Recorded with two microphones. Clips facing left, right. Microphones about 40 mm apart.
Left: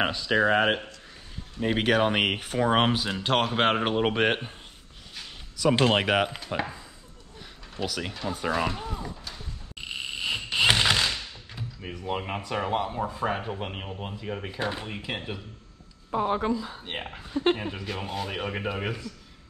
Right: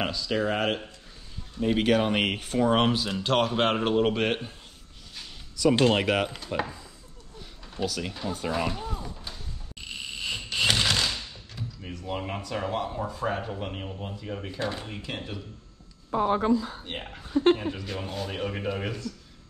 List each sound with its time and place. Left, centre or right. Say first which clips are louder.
0.0 s speech: left 4 dB; left
7.8 s speech: even; centre
9.3 s a sound: left 1 dB; centre
16.4 s speech: right 4 dB; left
16.8 s speech: left 2 dB; centre